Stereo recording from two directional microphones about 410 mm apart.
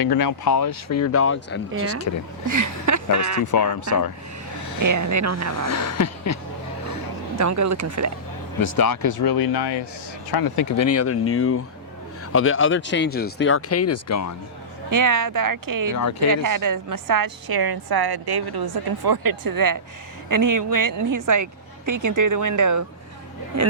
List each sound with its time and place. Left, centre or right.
0.0 s speech: left
1.7 s speech: right
2.5 s speech: right
3.4 s speech: left
4.8 s speech: right
5.6 s a sound: left
7.3 s speech: right
8.7 s speech: left
10.3 s speech: left
10.8 s speech: left
14.8 s a woman's voice: right